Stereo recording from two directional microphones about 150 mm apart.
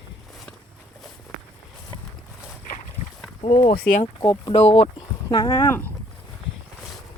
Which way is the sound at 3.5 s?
90° left.